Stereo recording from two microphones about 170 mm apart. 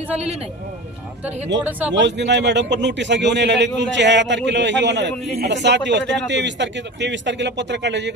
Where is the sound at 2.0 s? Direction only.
90° right.